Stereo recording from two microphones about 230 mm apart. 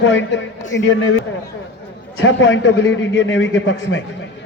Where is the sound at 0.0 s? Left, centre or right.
Left.